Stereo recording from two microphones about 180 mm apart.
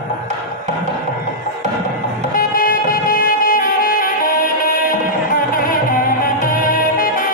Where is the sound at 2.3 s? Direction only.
50° left (ahead or behind).